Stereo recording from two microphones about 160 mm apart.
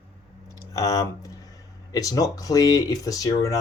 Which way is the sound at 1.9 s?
20° left (ahead or behind).